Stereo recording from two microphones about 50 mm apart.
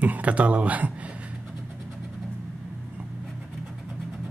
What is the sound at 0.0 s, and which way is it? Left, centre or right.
Speech, right.